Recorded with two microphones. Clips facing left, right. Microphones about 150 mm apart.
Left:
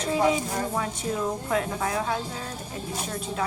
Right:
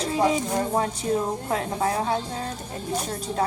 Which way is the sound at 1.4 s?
35° right (ahead or behind).